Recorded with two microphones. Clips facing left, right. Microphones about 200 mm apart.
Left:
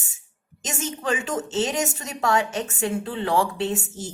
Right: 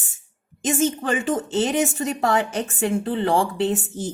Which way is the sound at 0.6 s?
50° right (ahead or behind).